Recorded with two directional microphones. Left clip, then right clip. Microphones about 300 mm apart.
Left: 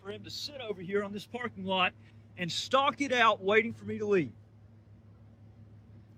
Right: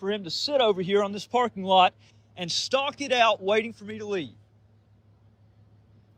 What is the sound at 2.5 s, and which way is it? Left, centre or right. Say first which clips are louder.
Speech: right 8 dB; right.